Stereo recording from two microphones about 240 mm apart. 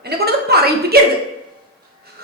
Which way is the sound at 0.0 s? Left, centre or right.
Right.